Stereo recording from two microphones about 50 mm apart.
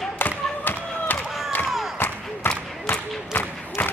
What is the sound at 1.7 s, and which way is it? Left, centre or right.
Crowd, centre.